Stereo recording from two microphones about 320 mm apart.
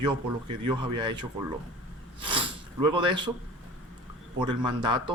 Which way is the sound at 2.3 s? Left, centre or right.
Centre.